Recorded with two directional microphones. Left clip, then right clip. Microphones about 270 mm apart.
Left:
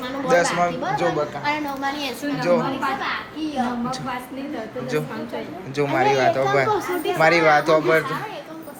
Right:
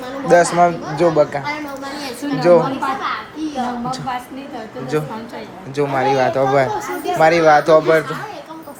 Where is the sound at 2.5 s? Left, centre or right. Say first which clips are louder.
Right 8 dB; centre.